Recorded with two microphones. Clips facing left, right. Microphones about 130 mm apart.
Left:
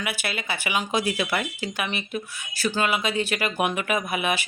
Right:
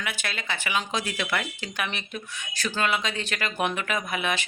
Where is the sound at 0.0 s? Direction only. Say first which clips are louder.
Left 3 dB; 10° left (ahead or behind).